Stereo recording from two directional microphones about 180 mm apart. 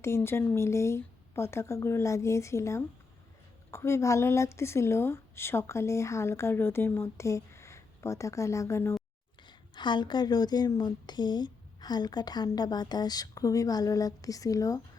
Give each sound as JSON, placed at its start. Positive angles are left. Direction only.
{"t": 0.0, "sound": "a woman's voice", "side_deg": 15}
{"t": 9.5, "sound": "a woman's voice", "side_deg": 25}